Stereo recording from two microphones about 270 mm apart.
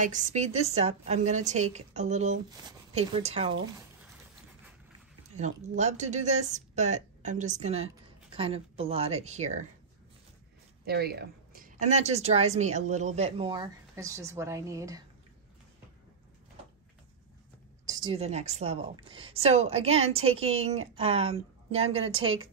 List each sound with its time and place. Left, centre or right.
0.0 s speech: right
5.3 s speech: right
10.9 s speech: right; by 15.0 s centre
17.8 s speech: centre